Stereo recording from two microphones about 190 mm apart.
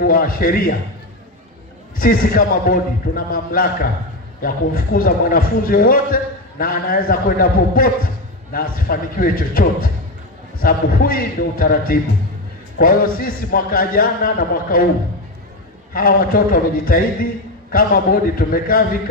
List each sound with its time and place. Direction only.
0.0 s a man's voice: 50° left (ahead or behind)
2.0 s a man's voice: 50° left (ahead or behind)
4.4 s a man's voice: 50° left (ahead or behind)
15.9 s a man's voice: 50° left (ahead or behind)